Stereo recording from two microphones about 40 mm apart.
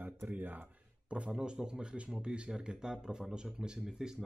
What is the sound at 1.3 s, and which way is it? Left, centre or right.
A man's voice, centre.